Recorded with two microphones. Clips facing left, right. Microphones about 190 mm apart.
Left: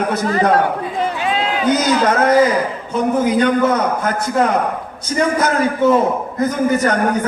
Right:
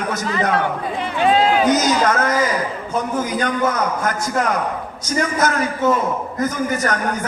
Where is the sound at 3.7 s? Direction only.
30° left (ahead or behind).